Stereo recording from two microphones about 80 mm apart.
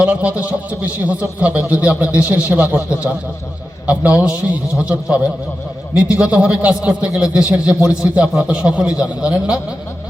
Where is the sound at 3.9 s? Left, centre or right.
Centre.